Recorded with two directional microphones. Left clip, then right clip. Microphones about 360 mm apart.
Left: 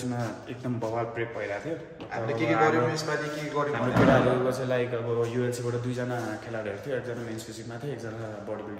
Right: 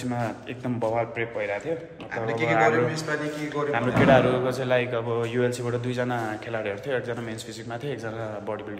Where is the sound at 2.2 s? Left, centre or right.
Centre.